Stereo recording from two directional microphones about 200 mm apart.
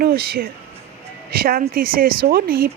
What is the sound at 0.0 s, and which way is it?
Speech, 50° right (ahead or behind).